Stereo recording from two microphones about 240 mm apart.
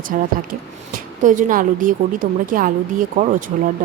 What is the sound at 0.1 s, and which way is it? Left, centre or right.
Speech, right.